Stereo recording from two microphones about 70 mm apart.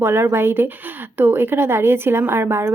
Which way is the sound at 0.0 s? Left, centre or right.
Right.